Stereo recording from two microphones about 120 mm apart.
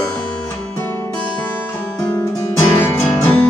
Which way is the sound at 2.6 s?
20° left (ahead or behind).